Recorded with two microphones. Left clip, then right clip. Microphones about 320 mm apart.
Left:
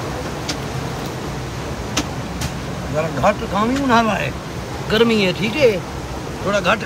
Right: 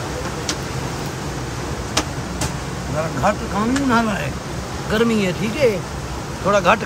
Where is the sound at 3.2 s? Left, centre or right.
Centre.